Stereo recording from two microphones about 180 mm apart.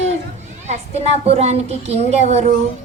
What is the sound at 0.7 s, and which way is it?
A child's voice, 35° right (ahead or behind).